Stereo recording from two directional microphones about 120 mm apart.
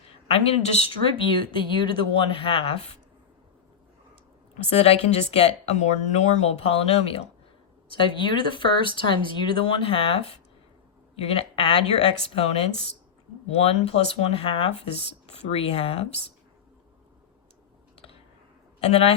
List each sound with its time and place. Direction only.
0.3 s speech: 60° left (ahead or behind)
1.2 s speech: 45° left (ahead or behind)
4.6 s speech: 60° left (ahead or behind)
7.9 s speech: 40° left (ahead or behind)
18.8 s speech: 55° left (ahead or behind)